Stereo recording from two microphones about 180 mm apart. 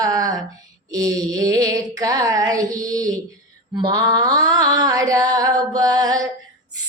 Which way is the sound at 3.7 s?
20° right (ahead or behind).